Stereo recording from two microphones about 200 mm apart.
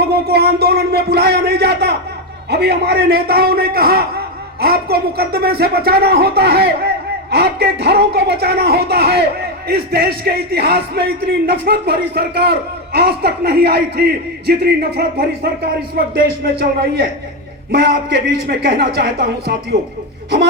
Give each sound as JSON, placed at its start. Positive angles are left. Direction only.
{"t": 0.0, "sound": "music", "side_deg": -55}
{"t": 2.5, "sound": "a man's voice", "side_deg": -55}
{"t": 17.7, "sound": "music", "side_deg": -55}
{"t": 19.7, "sound": "a man's voice", "side_deg": -55}